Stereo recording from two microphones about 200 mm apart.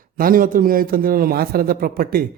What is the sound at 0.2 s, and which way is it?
A man's voice, 45° right (ahead or behind).